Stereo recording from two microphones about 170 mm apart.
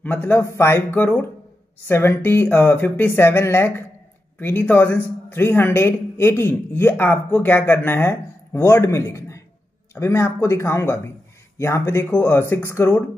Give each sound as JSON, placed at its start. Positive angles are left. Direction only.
{"t": 0.0, "sound": "a man's voice", "side_deg": 10}